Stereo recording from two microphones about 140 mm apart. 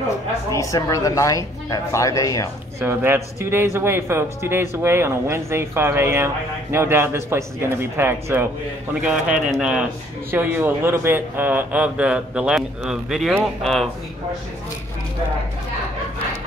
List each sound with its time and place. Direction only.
0.5 s speech: 25° left (ahead or behind)
2.8 s speech: 15° right (ahead or behind); by 13.8 s centre (ahead or behind)